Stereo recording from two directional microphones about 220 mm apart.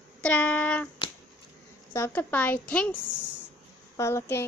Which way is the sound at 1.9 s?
10° left (ahead or behind).